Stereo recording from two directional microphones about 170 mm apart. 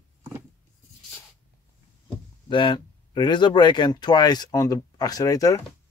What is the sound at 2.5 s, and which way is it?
Speech, 30° left (ahead or behind).